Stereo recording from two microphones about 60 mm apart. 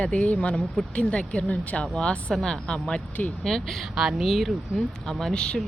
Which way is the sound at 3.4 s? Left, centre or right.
Centre.